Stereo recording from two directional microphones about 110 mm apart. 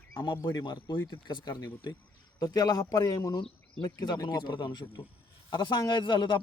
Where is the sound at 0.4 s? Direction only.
40° left (ahead or behind).